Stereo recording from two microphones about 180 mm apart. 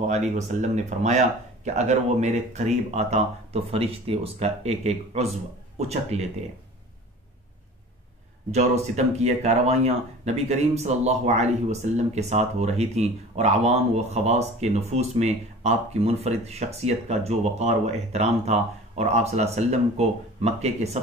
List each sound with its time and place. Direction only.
0.0 s speech: 40° right (ahead or behind)
8.5 s speech: 40° right (ahead or behind)